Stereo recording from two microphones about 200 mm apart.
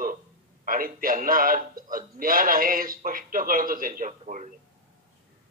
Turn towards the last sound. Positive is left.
turn(degrees=-40)  # may be behind; listen again after turning